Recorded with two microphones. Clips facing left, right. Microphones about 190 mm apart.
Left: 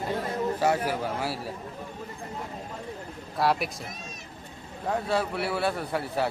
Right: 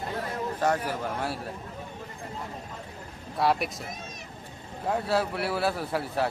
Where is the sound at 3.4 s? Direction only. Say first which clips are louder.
Even; centre (ahead or behind).